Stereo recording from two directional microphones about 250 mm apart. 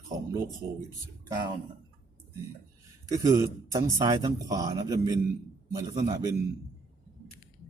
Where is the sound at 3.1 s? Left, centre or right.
Centre.